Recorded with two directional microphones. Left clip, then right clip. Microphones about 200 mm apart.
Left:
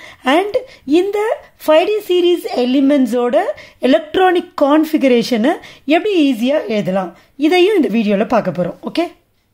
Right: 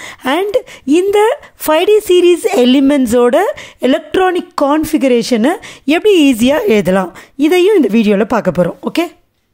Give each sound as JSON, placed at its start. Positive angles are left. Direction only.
{"t": 0.0, "sound": "speech", "side_deg": -30}